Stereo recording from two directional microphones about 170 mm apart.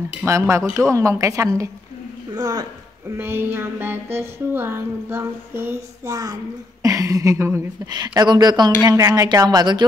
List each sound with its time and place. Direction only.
0.2 s music: 15° right (ahead or behind)
2.3 s speech: 25° right (ahead or behind)
3.2 s music: 15° right (ahead or behind)
6.8 s speech: 20° right (ahead or behind)